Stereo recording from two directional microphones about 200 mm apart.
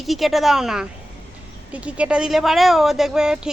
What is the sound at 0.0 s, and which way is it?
A woman's voice, centre (ahead or behind).